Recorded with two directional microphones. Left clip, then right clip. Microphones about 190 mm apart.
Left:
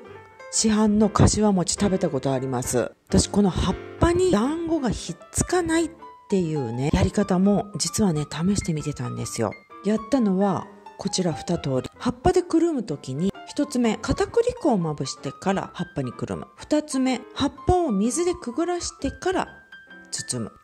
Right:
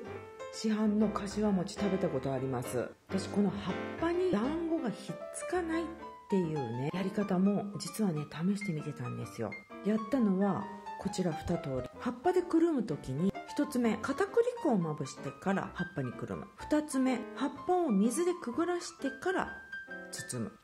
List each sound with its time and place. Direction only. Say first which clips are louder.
0.6 s speech: left 11 dB; 45° left (ahead or behind)